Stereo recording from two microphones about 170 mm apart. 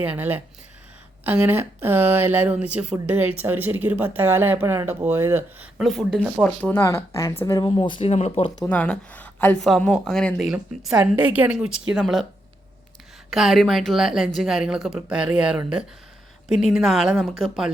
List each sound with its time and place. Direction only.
0.0 s speech: 10° right (ahead or behind); by 8.4 s 35° left (ahead or behind)
8.7 s a woman's voice: 10° left (ahead or behind)
13.3 s a woman's voice: centre (ahead or behind)